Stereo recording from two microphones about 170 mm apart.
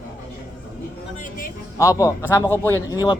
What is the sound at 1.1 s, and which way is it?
Music, 45° left (ahead or behind).